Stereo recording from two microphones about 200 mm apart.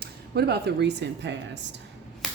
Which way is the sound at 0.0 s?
55° right (ahead or behind).